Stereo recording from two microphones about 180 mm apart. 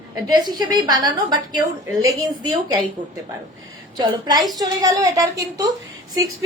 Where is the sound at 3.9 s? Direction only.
25° right (ahead or behind).